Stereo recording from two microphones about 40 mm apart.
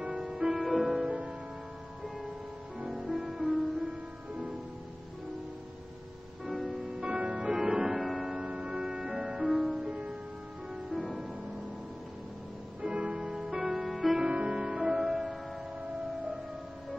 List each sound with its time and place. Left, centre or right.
0.0 s music: right
0.3 s music: centre
0.6 s music: centre
1.0 s music: right
2.9 s music: centre
4.3 s music: right
6.5 s music: centre
6.9 s music: right
7.9 s music: centre
8.3 s music: right
9.5 s music: centre
9.8 s music: right
12.8 s music: right; by 14.1 s centre
14.1 s music: right; by 15.3 s centre